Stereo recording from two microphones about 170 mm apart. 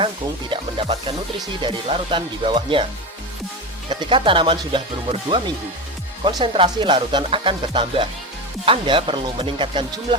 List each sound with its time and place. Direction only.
0.5 s speech: 30° right (ahead or behind)
3.8 s speech: 30° right (ahead or behind)
6.2 s speech: 30° right (ahead or behind)